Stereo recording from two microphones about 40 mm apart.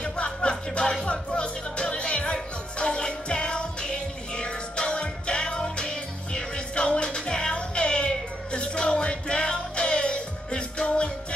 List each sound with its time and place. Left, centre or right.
0.0 s music: left